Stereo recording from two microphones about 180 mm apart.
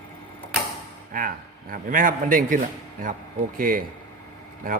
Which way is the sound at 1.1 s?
50° right (ahead or behind).